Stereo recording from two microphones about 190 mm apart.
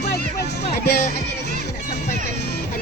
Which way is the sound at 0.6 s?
35° left (ahead or behind).